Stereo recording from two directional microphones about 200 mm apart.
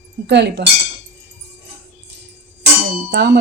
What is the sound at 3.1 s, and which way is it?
Speech, 55° right (ahead or behind).